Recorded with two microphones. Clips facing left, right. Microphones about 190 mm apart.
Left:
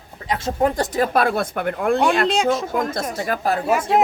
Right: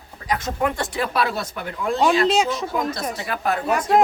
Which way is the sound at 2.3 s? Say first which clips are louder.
Left 1 dB; centre (ahead or behind).